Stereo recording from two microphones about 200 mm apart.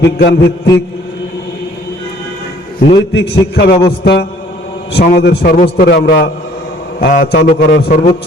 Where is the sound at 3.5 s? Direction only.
55° left (ahead or behind).